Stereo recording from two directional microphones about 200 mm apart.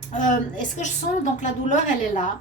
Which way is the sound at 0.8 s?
40° left (ahead or behind).